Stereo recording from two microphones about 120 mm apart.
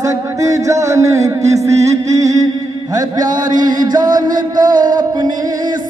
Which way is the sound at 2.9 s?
35° right (ahead or behind).